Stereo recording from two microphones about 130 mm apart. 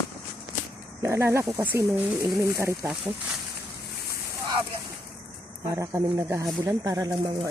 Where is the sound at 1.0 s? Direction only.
20° right (ahead or behind).